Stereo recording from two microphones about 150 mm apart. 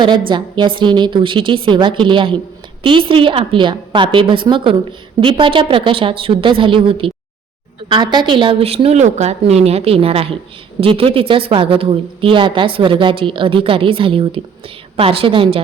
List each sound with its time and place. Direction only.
0.0 s a woman's voice: 30° right (ahead or behind)